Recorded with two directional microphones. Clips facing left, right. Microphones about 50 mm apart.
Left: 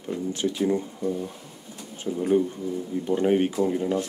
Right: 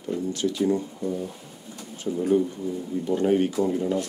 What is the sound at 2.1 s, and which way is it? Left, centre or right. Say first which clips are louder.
Speech: right 1 dB; centre.